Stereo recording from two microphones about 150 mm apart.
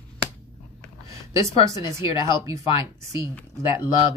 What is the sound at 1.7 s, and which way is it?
Speech, 20° right (ahead or behind).